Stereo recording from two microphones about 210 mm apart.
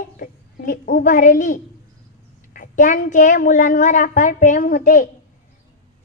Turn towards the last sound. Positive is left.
turn(degrees=40)  # may be behind; listen again after turning